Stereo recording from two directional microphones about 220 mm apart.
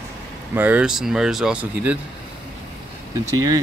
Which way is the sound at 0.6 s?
5° right (ahead or behind).